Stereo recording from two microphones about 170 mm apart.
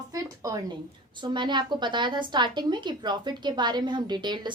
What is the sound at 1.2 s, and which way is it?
A woman's voice, 25° right (ahead or behind).